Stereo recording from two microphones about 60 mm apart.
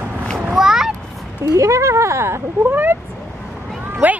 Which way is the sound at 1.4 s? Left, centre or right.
Right.